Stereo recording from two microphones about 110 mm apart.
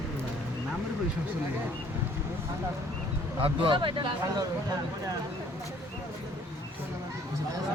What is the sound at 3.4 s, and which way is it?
Speech, 50° right (ahead or behind).